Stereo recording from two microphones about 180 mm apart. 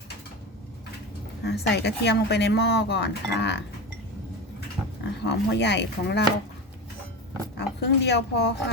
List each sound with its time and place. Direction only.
1.5 s speech: 70° left (ahead or behind)
5.2 s speech: 70° left (ahead or behind)
7.5 s speech: 70° left (ahead or behind)